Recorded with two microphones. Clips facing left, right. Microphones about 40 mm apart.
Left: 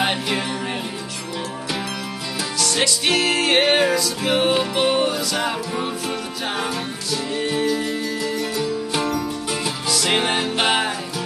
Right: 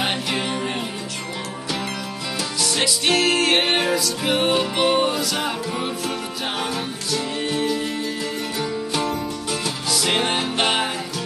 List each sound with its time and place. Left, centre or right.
2.6 s music: centre
7.8 s music: right
9.5 s music: centre